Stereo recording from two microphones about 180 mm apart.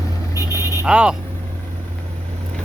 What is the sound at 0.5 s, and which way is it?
Vehicle, 15° right (ahead or behind).